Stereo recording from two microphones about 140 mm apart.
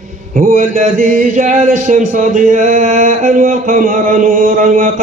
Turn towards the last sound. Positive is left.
turn(degrees=-70)  # may be behind; listen again after turning